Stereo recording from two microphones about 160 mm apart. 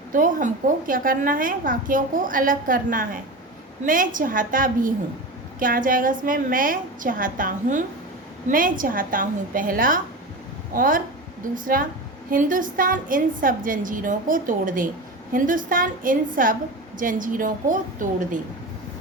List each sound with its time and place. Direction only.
0.1 s a woman's voice: 55° right (ahead or behind)